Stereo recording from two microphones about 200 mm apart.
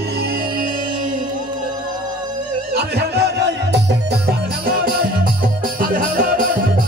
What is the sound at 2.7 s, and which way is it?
Music, 55° right (ahead or behind).